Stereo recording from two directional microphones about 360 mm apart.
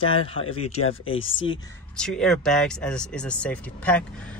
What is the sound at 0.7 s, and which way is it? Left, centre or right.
Speech, left.